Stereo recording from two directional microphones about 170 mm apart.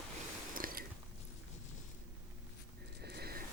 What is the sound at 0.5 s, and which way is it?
Biting, 55° right (ahead or behind).